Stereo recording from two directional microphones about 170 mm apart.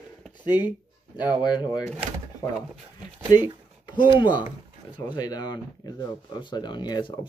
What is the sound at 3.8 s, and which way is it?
Speech, 30° left (ahead or behind).